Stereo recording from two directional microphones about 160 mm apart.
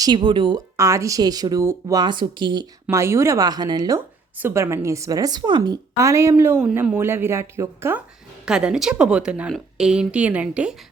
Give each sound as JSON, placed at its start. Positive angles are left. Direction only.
{"t": 0.0, "sound": "a woman's voice", "side_deg": -30}
{"t": 0.8, "sound": "a woman's voice", "side_deg": -20}
{"t": 2.8, "sound": "a woman's voice", "side_deg": -15}